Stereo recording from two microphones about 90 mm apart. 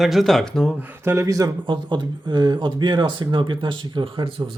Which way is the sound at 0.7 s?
15° right (ahead or behind).